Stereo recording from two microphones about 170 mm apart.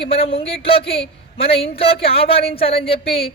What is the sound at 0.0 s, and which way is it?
Speech, 35° left (ahead or behind).